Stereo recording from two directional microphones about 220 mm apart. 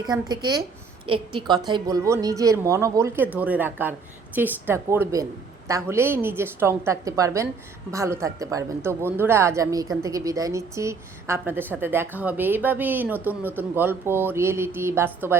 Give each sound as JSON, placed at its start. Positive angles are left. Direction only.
{"t": 0.0, "sound": "a woman's voice", "side_deg": -20}